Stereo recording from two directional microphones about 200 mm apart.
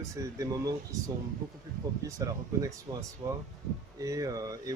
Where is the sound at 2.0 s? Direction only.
15° right (ahead or behind).